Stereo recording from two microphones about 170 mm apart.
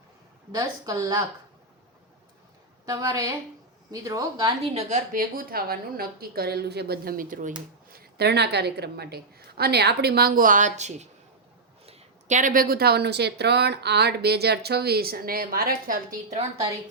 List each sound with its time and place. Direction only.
0.5 s a woman's voice: 20° right (ahead or behind)
2.8 s a woman's voice: 20° right (ahead or behind)
4.7 s speech: 40° right (ahead or behind)
5.1 s a woman's voice: 55° right (ahead or behind)
8.2 s speech: 75° right (ahead or behind); by 16.4 s 60° right (ahead or behind)